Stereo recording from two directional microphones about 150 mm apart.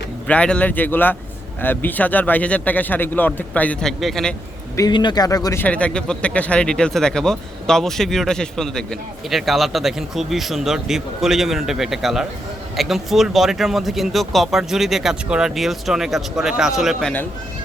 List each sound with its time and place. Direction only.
0.3 s speech: 10° left (ahead or behind)
4.8 s speech: 30° left (ahead or behind)
5.6 s speech: 10° left (ahead or behind)